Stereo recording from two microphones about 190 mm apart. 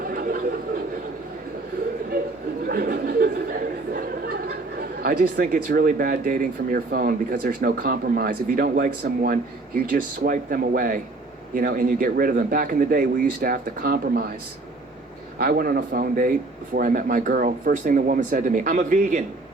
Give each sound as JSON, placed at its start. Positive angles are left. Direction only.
{"t": 0.1, "sound": "a sound", "side_deg": -50}
{"t": 2.6, "sound": "speech", "side_deg": -50}
{"t": 15.4, "sound": "speech", "side_deg": -50}